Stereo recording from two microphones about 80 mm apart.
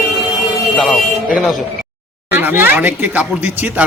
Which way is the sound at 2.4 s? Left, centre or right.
Right.